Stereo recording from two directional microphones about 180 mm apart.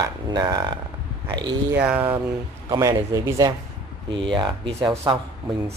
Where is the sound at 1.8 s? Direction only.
10° right (ahead or behind).